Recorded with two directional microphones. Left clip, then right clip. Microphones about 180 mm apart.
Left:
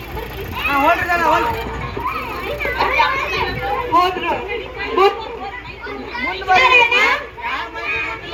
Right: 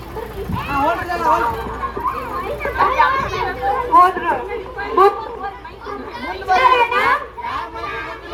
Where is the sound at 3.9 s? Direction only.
45° left (ahead or behind).